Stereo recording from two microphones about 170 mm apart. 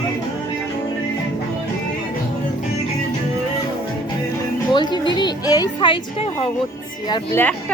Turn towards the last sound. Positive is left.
turn(degrees=10)  # may be behind; listen again after turning